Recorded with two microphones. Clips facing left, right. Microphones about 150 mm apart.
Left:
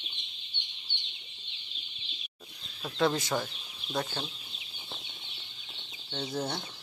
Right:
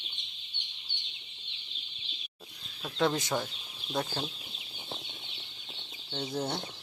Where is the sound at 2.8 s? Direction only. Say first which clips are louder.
Left 1 dB; 5° left (ahead or behind).